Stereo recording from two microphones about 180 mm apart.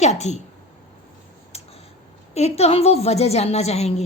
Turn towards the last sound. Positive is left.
turn(degrees=35)  # may be behind; listen again after turning